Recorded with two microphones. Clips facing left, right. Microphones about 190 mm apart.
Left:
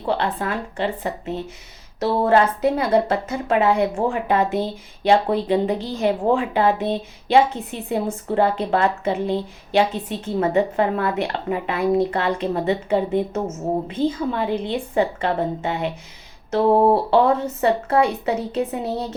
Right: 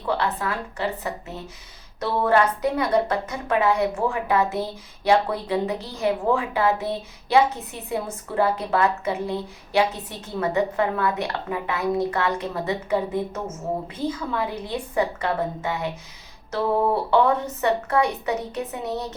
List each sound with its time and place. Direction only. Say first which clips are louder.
0.0 s a woman's voice: left 2 dB; 30° left (ahead or behind)